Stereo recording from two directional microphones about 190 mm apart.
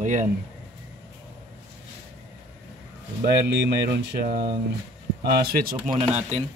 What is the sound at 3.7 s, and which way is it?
Speech, 55° right (ahead or behind).